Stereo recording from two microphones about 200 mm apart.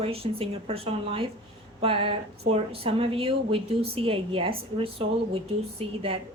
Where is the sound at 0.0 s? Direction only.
30° right (ahead or behind).